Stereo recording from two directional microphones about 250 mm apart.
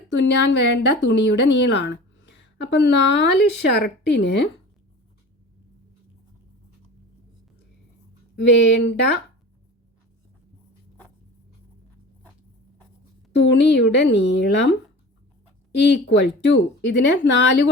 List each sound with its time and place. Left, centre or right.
0.1 s a woman's voice: left
8.4 s a woman's voice: left
13.3 s a woman's voice: left
15.9 s a woman's voice: left